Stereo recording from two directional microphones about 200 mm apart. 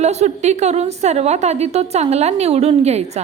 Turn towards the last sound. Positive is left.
turn(degrees=-35)  # may be behind; listen again after turning